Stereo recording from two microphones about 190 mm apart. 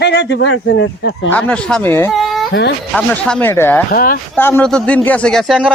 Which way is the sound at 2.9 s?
5° left (ahead or behind).